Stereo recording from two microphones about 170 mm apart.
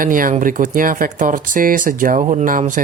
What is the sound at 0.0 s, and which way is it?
Speech, 55° right (ahead or behind).